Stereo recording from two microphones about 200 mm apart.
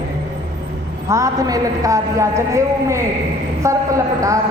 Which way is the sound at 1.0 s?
15° right (ahead or behind).